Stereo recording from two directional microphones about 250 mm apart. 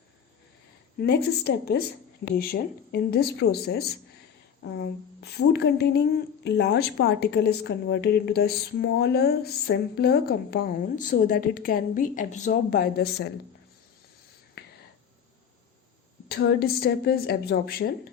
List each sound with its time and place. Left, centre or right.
0.9 s speech: left
14.6 s whispering: left
16.3 s speech: left